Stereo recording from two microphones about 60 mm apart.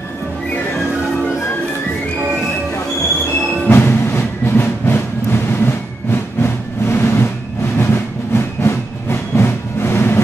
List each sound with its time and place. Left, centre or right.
3.6 s music: left
6.4 s vehicle: left
7.8 s music: left